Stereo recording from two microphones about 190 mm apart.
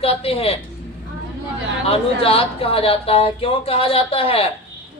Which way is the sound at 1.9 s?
30° left (ahead or behind).